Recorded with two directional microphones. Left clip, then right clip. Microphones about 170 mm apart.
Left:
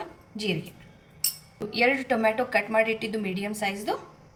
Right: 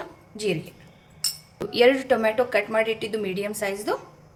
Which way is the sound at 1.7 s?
50° right (ahead or behind).